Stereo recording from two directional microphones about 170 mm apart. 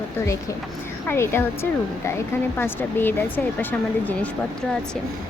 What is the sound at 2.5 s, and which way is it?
Speech, 10° left (ahead or behind).